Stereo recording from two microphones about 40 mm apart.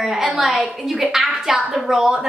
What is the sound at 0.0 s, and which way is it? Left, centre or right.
A woman's voice, centre.